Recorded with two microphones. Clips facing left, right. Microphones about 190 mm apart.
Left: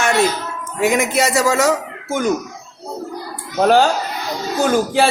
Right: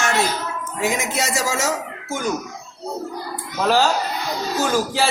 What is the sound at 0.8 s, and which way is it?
Speech, 60° left (ahead or behind).